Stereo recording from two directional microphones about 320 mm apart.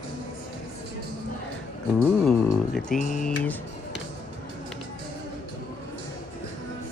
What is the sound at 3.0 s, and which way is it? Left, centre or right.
Speech, left.